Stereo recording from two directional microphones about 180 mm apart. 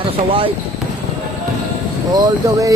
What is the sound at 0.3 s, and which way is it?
Speech, 30° right (ahead or behind).